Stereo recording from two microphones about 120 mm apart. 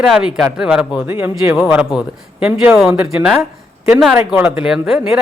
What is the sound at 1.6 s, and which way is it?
A man's voice, 5° right (ahead or behind).